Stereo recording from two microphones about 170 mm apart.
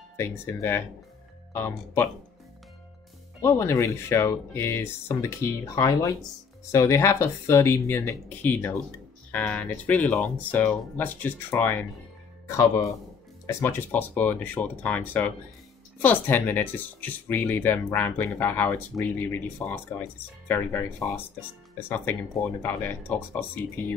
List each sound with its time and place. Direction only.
0.2 s speech: 15° left (ahead or behind)
3.3 s speech: 15° left (ahead or behind)